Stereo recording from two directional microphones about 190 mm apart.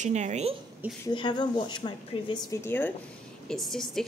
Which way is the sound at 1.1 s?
25° left (ahead or behind).